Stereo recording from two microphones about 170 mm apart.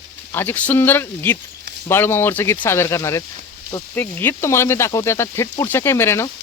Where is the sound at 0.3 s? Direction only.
10° left (ahead or behind).